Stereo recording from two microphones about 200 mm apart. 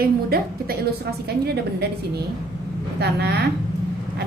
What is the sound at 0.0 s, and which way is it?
Speech, 50° right (ahead or behind).